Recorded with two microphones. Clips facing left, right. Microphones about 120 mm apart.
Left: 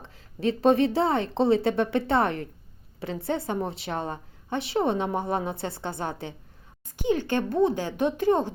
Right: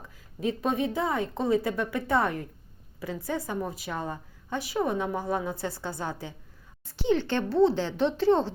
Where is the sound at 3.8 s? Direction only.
65° left (ahead or behind).